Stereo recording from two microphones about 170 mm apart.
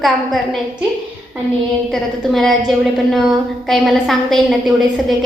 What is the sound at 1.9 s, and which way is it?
A woman's voice, centre (ahead or behind).